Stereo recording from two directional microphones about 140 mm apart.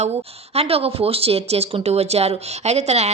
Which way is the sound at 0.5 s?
45° right (ahead or behind).